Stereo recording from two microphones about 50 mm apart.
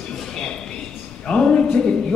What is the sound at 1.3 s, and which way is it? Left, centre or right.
Speech, centre.